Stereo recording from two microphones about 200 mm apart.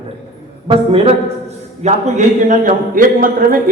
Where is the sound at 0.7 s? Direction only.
30° right (ahead or behind); by 3.6 s 45° right (ahead or behind).